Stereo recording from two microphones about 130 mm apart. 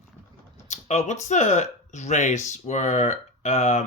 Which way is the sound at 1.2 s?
65° left (ahead or behind).